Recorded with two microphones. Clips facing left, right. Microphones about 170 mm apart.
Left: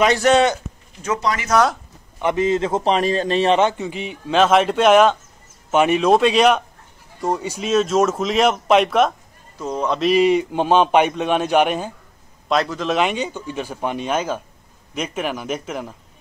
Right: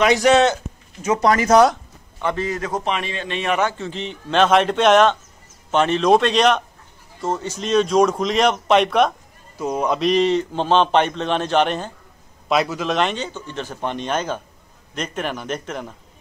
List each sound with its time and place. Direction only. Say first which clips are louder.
0.3 s speech: even; centre (ahead or behind)
1.2 s speech: right 9 dB; 45° right (ahead or behind)
2.1 s a man's voice: left 5 dB; 20° left (ahead or behind); by 9.1 s centre (ahead or behind)
9.6 s speech: right 1 dB; 10° right (ahead or behind)
9.9 s a man's voice: left 3 dB; 5° left (ahead or behind)
12.4 s speech: even; 5° right (ahead or behind)
12.9 s a man's voice: left 3 dB; 10° left (ahead or behind)